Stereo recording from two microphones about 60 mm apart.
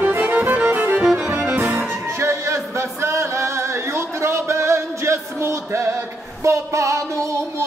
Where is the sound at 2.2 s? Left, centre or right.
Right.